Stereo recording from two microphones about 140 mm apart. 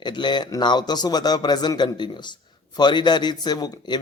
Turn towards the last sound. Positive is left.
turn(degrees=30)  # may be behind; listen again after turning